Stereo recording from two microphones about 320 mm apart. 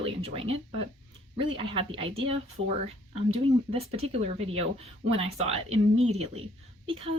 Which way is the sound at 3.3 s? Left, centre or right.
Centre.